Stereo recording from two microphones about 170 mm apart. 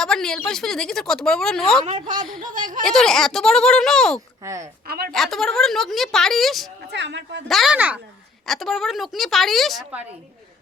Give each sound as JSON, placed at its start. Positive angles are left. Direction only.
{"t": 0.0, "sound": "speech", "side_deg": 5}
{"t": 2.4, "sound": "speech", "side_deg": -50}
{"t": 2.8, "sound": "speech", "side_deg": 5}
{"t": 4.4, "sound": "a woman's voice", "side_deg": -15}
{"t": 4.9, "sound": "a woman's voice", "side_deg": -65}
{"t": 5.1, "sound": "speech", "side_deg": 0}
{"t": 6.8, "sound": "speech", "side_deg": -90}
{"t": 7.4, "sound": "speech", "side_deg": 0}